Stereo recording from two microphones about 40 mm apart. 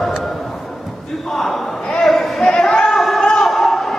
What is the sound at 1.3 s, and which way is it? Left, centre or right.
Speech, centre.